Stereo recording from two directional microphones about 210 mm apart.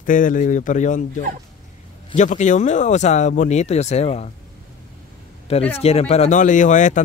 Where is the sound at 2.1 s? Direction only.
35° left (ahead or behind).